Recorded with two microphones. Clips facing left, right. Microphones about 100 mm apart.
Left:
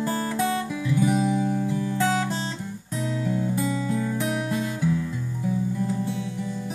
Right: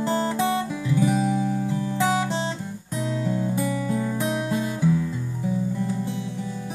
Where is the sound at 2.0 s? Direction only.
5° right (ahead or behind).